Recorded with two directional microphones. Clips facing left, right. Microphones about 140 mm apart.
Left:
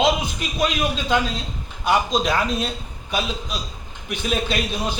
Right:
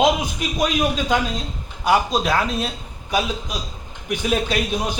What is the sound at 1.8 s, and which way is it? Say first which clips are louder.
A man's voice: right 1 dB; 10° right (ahead or behind).